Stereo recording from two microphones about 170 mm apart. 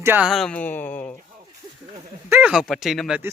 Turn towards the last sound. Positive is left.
turn(degrees=0)  # may be behind; listen again after turning